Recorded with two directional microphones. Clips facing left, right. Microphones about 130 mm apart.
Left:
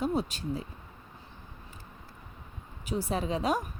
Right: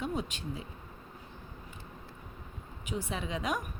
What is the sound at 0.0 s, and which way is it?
Speech, 35° left (ahead or behind).